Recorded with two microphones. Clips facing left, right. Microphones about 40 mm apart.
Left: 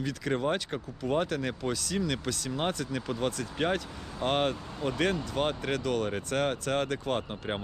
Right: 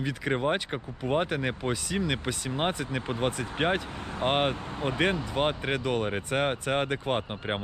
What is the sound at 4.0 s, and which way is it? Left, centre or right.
Speech, right.